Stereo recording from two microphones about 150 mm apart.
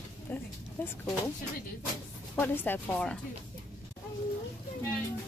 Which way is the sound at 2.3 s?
15° left (ahead or behind).